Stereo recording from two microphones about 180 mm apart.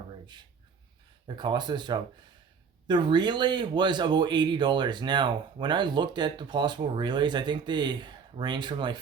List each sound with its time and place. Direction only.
1.4 s speech: 25° right (ahead or behind)